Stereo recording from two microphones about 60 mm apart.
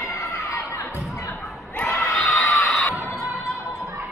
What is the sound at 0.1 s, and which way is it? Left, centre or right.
Children shouting, left.